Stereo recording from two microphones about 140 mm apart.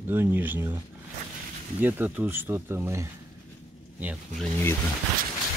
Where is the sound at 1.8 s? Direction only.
15° right (ahead or behind).